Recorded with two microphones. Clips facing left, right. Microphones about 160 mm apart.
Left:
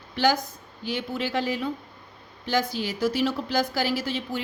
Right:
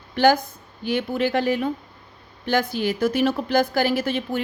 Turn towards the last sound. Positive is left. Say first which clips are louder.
# right 5 dB
turn(degrees=-55)  # may be behind; listen again after turning